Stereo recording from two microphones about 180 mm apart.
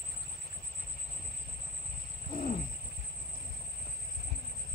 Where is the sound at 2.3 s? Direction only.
50° left (ahead or behind).